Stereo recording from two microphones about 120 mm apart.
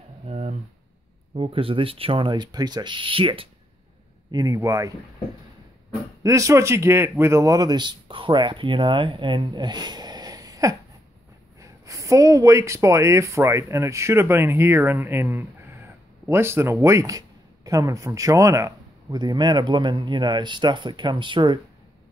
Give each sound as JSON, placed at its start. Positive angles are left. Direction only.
{"t": 0.3, "sound": "a sound", "side_deg": -60}
{"t": 1.3, "sound": "speech", "side_deg": -50}
{"t": 4.3, "sound": "speech", "side_deg": -30}
{"t": 6.2, "sound": "a man's voice", "side_deg": -25}
{"t": 19.1, "sound": "speech", "side_deg": -35}